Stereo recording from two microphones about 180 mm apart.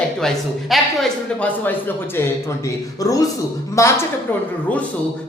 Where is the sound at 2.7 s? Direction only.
20° left (ahead or behind).